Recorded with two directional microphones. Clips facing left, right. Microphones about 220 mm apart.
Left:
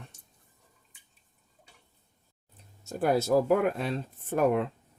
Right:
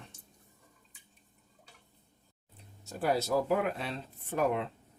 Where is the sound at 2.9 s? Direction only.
45° left (ahead or behind).